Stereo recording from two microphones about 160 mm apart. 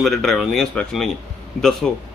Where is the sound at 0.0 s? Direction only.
Centre (ahead or behind).